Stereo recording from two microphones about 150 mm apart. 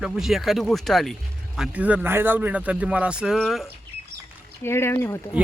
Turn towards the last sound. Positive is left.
turn(degrees=15)  # may be behind; listen again after turning